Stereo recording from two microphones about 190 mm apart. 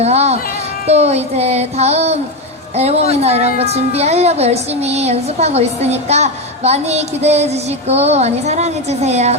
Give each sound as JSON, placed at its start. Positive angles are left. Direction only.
{"t": 0.0, "sound": "speech", "side_deg": -35}